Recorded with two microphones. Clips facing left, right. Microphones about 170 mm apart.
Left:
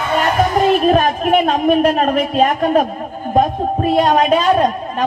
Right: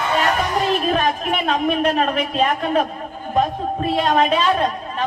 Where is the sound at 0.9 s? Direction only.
45° left (ahead or behind).